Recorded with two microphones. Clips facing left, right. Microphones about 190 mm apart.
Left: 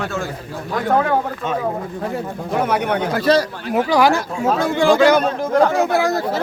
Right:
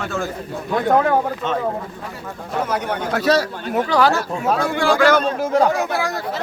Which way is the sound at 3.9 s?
15° left (ahead or behind).